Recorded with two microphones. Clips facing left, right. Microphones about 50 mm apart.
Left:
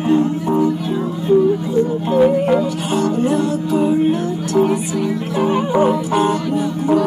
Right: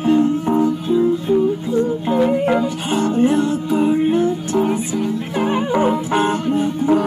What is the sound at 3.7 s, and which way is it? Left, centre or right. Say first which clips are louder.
Music: left 2 dB; centre.